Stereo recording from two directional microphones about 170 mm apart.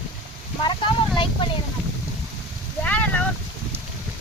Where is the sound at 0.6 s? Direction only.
30° left (ahead or behind).